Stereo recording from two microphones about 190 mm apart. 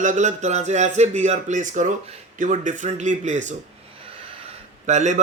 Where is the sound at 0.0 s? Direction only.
40° right (ahead or behind).